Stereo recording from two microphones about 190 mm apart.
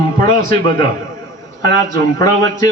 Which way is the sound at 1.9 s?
20° left (ahead or behind).